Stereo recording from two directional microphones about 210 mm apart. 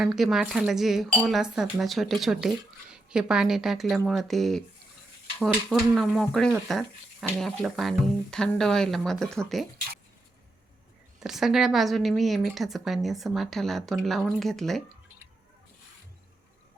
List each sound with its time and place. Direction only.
0.0 s a woman's voice: centre (ahead or behind)
5.6 s a woman's voice: centre (ahead or behind)
11.2 s a woman's voice: centre (ahead or behind)